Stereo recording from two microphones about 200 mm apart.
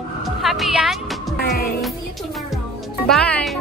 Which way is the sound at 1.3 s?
50° left (ahead or behind).